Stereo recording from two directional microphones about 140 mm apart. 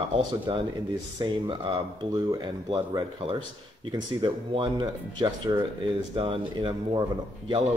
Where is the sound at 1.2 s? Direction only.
35° right (ahead or behind).